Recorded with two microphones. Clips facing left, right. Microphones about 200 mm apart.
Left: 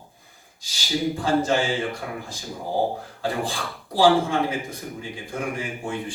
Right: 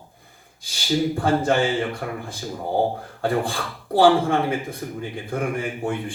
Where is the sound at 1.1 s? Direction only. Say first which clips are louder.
Left 1 dB; 55° right (ahead or behind).